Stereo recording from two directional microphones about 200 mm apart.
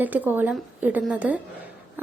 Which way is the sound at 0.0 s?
10° right (ahead or behind).